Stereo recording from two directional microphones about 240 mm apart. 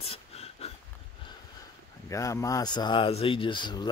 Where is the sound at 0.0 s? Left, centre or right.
Left.